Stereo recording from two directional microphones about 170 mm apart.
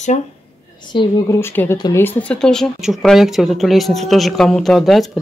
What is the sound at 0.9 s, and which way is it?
Speech, 15° left (ahead or behind).